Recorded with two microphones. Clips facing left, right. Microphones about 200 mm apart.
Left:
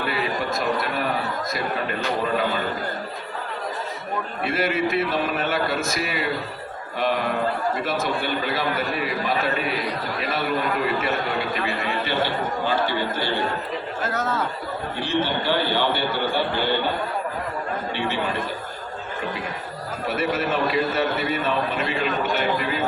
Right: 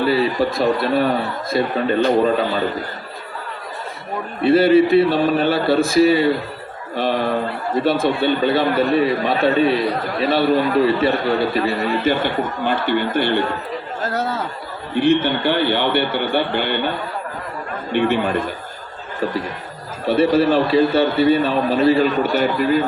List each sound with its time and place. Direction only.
0.0 s a man's voice: 30° right (ahead or behind)
4.4 s a man's voice: 30° right (ahead or behind); by 13.3 s 60° right (ahead or behind)
14.1 s a man's voice: 35° right (ahead or behind)
14.9 s a man's voice: 60° right (ahead or behind)
17.9 s a man's voice: 55° right (ahead or behind)
20.1 s a man's voice: 30° right (ahead or behind)